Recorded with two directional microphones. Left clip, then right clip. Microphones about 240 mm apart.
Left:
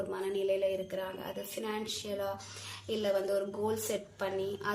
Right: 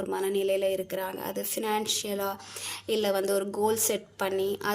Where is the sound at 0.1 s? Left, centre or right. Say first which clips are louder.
Right 7 dB; right.